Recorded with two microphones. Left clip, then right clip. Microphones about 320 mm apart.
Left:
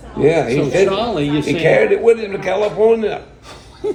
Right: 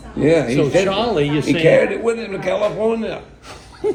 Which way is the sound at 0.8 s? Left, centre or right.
Right.